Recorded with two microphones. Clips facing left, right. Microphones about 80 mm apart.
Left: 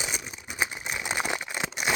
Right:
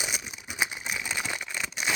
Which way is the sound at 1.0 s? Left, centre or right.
Left.